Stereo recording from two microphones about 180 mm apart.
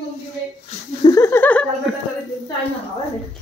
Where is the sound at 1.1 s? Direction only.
15° left (ahead or behind).